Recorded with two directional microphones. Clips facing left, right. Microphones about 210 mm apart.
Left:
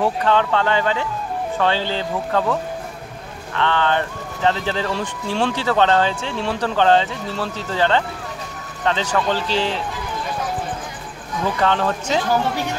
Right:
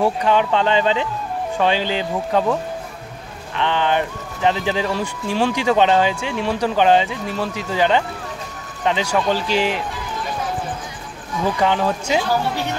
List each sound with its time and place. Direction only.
0.0 s speech: 15° right (ahead or behind)
3.5 s speech: 15° right (ahead or behind)
11.6 s speech: 10° right (ahead or behind)